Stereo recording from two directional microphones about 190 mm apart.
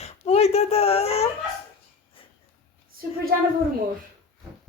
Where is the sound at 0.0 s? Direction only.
35° left (ahead or behind).